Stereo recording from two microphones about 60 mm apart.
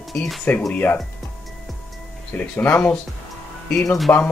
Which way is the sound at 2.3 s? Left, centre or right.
Left.